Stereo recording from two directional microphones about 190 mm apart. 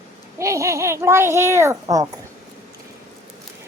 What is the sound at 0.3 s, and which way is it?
A child's voice, 15° right (ahead or behind).